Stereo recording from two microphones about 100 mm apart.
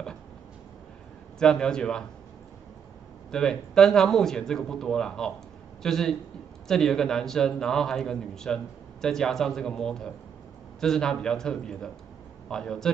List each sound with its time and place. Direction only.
1.4 s a man's voice: 5° left (ahead or behind)
3.3 s a man's voice: 5° left (ahead or behind)